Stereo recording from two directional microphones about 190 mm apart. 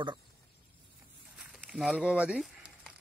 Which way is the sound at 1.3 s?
Centre (ahead or behind).